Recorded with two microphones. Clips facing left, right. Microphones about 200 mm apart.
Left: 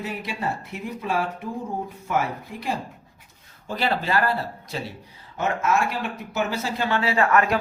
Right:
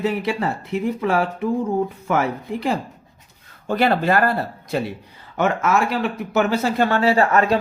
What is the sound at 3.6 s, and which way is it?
Speech, 55° right (ahead or behind).